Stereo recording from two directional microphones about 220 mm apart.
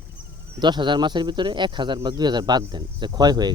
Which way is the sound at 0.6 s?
20° right (ahead or behind).